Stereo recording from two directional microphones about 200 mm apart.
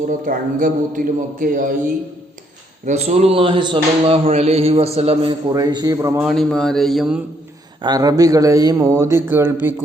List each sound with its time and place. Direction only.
0.3 s a man's voice: 45° right (ahead or behind)
2.8 s a man's voice: 35° right (ahead or behind); by 6.2 s 15° right (ahead or behind)
6.2 s speech: centre (ahead or behind)
7.8 s speech: 20° right (ahead or behind)